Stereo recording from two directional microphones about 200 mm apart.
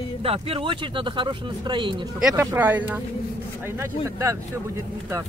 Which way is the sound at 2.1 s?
5° right (ahead or behind).